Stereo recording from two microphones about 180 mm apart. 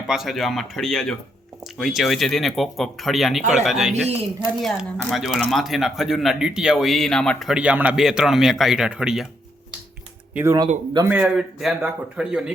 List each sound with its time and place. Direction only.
0.1 s speech: centre (ahead or behind)
10.3 s speech: 15° right (ahead or behind)
11.1 s speech: 5° right (ahead or behind)